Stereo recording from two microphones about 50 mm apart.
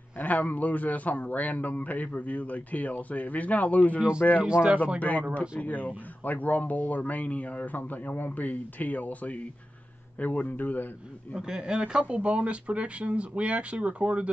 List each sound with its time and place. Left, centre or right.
0.2 s speech: left
4.4 s speech: right
5.6 s speech: left
11.3 s speech: centre